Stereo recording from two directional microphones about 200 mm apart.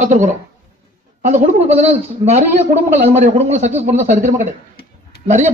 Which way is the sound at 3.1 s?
35° right (ahead or behind).